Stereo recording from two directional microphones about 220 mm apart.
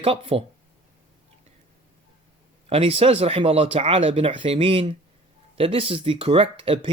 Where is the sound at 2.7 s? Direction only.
25° right (ahead or behind).